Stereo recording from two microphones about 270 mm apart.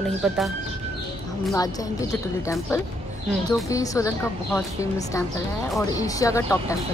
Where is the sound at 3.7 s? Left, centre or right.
Centre.